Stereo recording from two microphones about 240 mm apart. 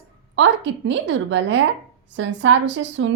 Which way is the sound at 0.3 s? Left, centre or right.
Right.